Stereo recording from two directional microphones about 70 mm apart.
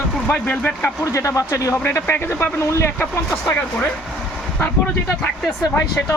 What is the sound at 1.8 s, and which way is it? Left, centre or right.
Speech, left.